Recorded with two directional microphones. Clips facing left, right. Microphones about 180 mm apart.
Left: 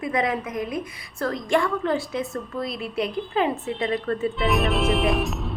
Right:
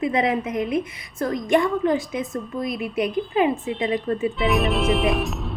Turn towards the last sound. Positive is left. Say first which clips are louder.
# right 1 dB
turn(degrees=0)  # may be behind; listen again after turning